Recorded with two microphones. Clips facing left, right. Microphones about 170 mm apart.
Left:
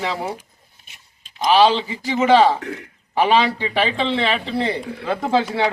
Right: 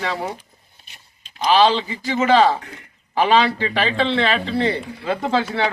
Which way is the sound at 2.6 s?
80° left.